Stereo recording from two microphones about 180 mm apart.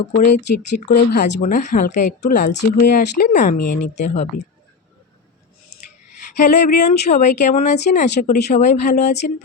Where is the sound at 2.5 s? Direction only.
70° left (ahead or behind); by 3.7 s 50° left (ahead or behind).